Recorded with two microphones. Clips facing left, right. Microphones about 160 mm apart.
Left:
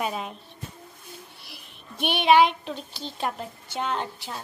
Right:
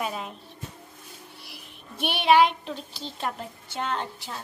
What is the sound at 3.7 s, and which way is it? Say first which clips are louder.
Speech: left 1 dB; 10° left (ahead or behind).